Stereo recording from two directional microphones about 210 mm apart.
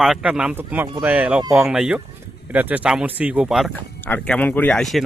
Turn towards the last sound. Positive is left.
turn(degrees=5)  # may be behind; listen again after turning